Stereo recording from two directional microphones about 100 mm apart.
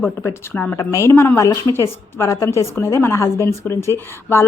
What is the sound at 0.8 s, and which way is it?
A woman's voice, 30° left (ahead or behind).